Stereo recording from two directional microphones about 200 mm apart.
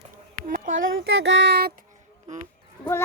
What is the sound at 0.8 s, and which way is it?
Speech, 70° right (ahead or behind).